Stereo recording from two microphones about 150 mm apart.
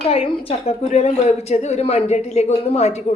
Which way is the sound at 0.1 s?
40° left (ahead or behind).